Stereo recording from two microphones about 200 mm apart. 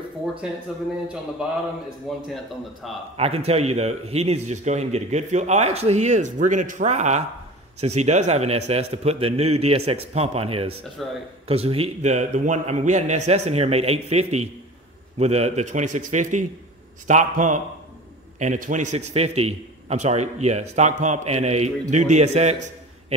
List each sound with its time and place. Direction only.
0.4 s a man's voice: 5° right (ahead or behind)
2.1 s a man's voice: centre (ahead or behind)
3.2 s a man's voice: 30° right (ahead or behind)
11.0 s a man's voice: centre (ahead or behind)
11.4 s a man's voice: 30° right (ahead or behind)